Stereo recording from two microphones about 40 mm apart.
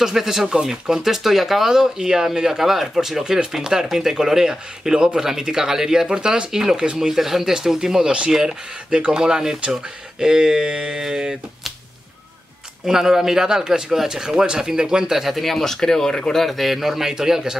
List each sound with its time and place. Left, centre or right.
0.0 s speech: centre
0.9 s speech: centre
12.8 s speech: centre
15.2 s a man's voice: centre